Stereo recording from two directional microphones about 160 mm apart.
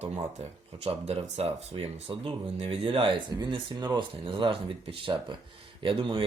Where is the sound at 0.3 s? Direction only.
40° right (ahead or behind).